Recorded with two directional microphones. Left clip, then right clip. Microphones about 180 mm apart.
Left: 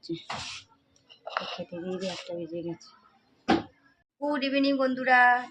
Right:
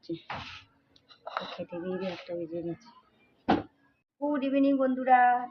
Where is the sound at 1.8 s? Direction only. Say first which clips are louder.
Left 1 dB; 10° left (ahead or behind).